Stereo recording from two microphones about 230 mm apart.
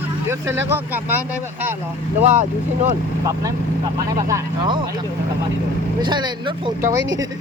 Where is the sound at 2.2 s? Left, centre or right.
Right.